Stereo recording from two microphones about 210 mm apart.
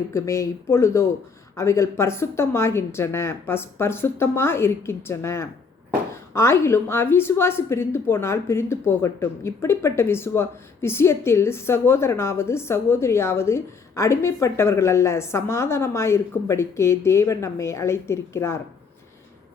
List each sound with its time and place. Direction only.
0.1 s a woman's voice: 15° left (ahead or behind)